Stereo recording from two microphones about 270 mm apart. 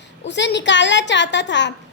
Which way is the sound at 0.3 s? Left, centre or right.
Left.